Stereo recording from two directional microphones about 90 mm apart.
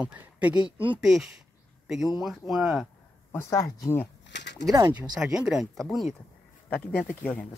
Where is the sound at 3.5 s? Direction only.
35° left (ahead or behind).